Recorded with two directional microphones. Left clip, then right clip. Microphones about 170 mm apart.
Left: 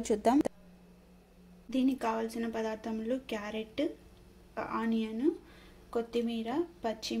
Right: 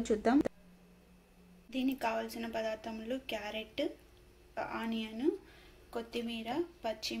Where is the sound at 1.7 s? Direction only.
60° left (ahead or behind).